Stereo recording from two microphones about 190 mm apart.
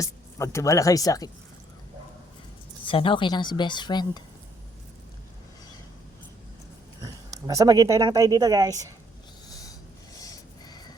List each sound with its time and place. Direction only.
0.0 s speech: 15° left (ahead or behind)
2.8 s a woman's voice: 25° left (ahead or behind)
7.0 s speech: 20° right (ahead or behind)
10.2 s a sound: 20° left (ahead or behind)